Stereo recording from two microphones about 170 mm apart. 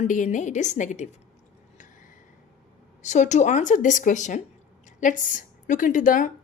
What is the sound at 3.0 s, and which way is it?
A woman's voice, 45° left (ahead or behind).